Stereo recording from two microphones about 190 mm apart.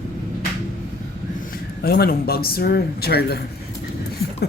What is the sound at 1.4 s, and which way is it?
Speech, 50° left (ahead or behind).